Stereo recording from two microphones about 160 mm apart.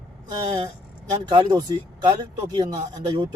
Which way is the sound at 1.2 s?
30° right (ahead or behind).